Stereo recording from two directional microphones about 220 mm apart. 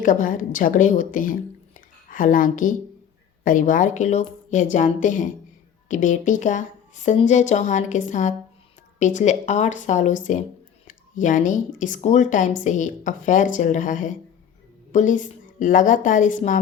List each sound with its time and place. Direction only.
0.0 s a woman's voice: 35° left (ahead or behind)
10.8 s a sound: 35° left (ahead or behind)
11.8 s a woman's voice: 35° left (ahead or behind)